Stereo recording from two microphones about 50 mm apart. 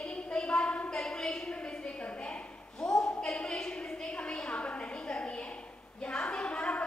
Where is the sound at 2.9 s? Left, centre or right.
Centre.